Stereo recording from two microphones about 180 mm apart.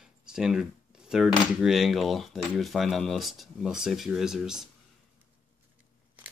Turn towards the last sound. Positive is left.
turn(degrees=-5)  # may be behind; listen again after turning